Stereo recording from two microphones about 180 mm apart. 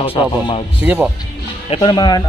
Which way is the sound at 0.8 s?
10° right (ahead or behind).